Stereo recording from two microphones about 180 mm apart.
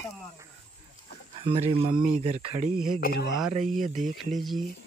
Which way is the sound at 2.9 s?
60° left (ahead or behind).